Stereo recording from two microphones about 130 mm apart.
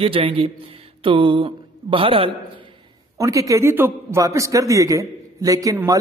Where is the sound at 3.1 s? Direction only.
25° right (ahead or behind).